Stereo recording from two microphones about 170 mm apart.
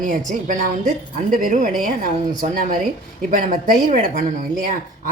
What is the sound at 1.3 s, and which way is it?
A woman's voice, 55° right (ahead or behind).